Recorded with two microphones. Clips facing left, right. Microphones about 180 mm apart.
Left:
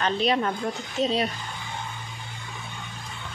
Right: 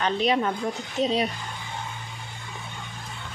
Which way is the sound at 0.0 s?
15° right (ahead or behind).